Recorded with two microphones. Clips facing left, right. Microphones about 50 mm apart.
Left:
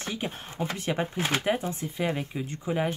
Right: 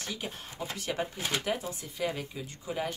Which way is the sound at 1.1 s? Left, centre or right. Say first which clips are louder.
Left 5 dB; left.